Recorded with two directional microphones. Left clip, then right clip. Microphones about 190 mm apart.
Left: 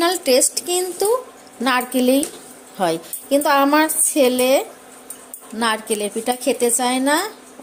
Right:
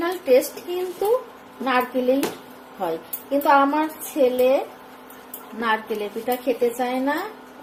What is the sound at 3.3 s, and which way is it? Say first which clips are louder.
A woman's voice: left 2 dB; 60° left (ahead or behind).